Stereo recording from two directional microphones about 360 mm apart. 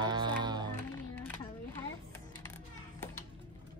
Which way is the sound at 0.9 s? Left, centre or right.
Centre.